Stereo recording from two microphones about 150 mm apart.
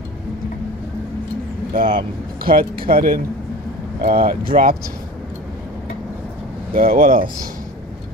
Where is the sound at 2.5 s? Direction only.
75° right (ahead or behind).